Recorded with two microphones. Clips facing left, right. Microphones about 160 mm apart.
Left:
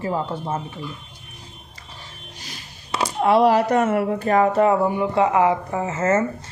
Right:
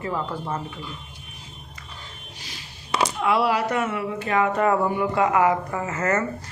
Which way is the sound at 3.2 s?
40° left (ahead or behind).